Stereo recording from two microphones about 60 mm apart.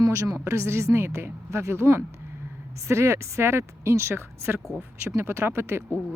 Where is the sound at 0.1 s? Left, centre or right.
Right.